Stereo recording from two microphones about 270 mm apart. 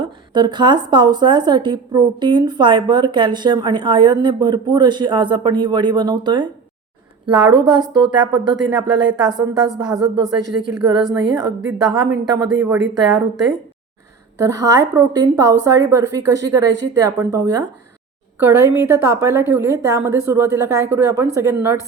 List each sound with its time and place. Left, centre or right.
0.0 s a woman's voice: centre
14.3 s a woman's voice: centre